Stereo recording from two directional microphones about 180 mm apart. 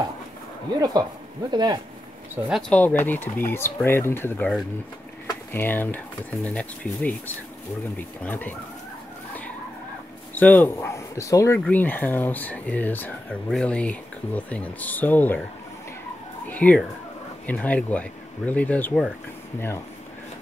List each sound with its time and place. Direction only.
1.5 s speech: 25° right (ahead or behind)
2.3 s speech: 5° right (ahead or behind)
2.7 s speech: 10° left (ahead or behind)
8.2 s speech: 10° left (ahead or behind)
10.3 s speech: 10° left (ahead or behind)
16.4 s speech: 10° left (ahead or behind)